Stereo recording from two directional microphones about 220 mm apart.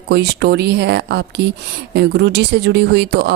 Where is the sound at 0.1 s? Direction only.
50° right (ahead or behind).